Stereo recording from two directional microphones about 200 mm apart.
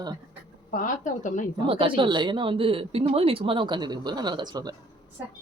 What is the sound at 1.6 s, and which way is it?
Speech, 25° right (ahead or behind).